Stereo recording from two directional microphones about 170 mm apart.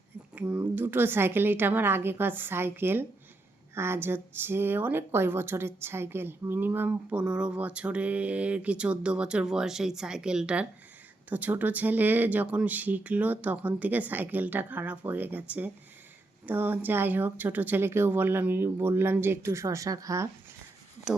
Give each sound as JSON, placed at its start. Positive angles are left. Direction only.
{"t": 0.3, "sound": "speech", "side_deg": -10}
{"t": 21.1, "sound": "speech", "side_deg": -5}